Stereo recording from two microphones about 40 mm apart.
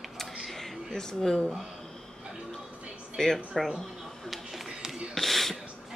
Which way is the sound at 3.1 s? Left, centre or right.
Centre.